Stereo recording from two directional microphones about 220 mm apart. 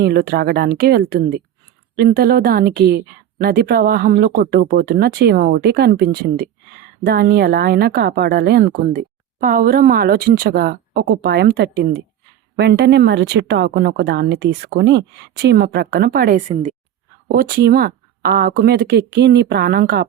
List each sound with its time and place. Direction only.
0.0 s a woman's voice: 45° right (ahead or behind)
8.6 s a woman's voice: 35° right (ahead or behind)